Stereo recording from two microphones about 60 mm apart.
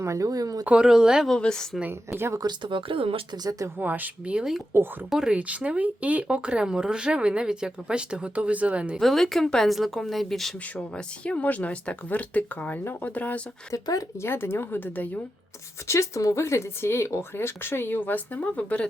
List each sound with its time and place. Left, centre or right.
0.0 s speech: right
0.6 s a woman's voice: centre
1.4 s a woman's voice: centre
1.9 s speech: right
3.8 s speech: right
4.4 s a woman's voice: centre
5.4 s a woman's voice: right
9.0 s speech: centre
10.9 s speech: centre
13.7 s speech: left
14.2 s speech: left
15.9 s speech: left